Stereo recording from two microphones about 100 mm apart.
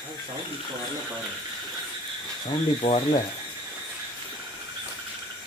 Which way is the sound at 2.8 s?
65° left (ahead or behind).